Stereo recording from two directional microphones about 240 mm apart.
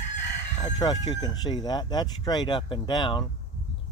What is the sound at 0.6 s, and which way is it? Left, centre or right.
Speech, centre.